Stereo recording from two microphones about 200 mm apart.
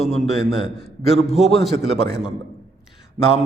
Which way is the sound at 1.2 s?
Centre (ahead or behind).